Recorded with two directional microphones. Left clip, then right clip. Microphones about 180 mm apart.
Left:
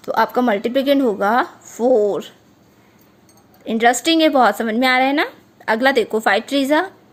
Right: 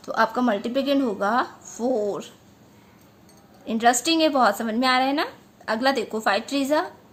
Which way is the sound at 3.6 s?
35° left (ahead or behind).